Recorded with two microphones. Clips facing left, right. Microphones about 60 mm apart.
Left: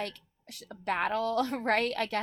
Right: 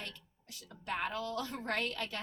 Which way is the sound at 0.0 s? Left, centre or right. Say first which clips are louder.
Left 10 dB; left.